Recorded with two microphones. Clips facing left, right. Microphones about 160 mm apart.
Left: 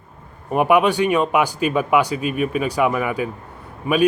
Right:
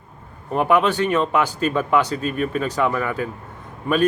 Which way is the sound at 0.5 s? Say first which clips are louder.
Left 2 dB; 15° left (ahead or behind).